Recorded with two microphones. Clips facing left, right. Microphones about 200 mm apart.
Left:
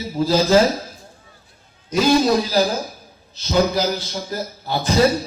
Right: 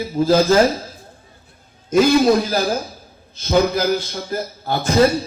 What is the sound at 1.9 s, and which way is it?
A man's voice, 50° right (ahead or behind).